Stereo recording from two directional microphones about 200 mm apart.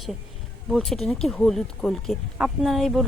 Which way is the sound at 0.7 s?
Centre (ahead or behind).